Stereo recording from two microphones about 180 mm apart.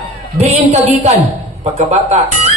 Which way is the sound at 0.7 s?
40° right (ahead or behind).